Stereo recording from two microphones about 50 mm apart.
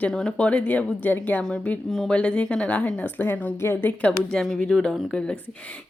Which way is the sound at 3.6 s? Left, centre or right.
Left.